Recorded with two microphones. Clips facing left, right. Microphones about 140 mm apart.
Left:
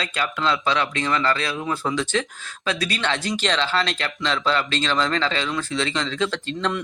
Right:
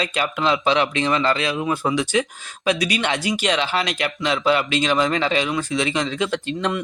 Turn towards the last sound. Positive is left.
turn(degrees=-15)  # may be behind; listen again after turning